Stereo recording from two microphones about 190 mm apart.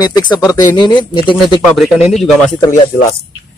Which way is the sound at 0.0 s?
20° left (ahead or behind).